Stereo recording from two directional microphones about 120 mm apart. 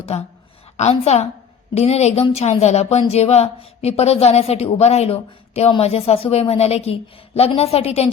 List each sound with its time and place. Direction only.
0.8 s speech: 65° left (ahead or behind)